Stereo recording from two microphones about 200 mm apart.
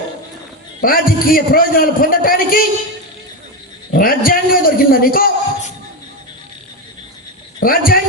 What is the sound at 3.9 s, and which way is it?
A man's voice, 45° left (ahead or behind).